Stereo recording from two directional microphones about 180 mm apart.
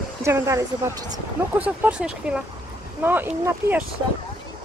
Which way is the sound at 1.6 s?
5° right (ahead or behind).